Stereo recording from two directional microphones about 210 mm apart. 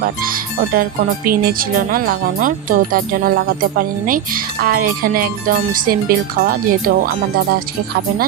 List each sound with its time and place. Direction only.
0.0 s speech: 40° right (ahead or behind)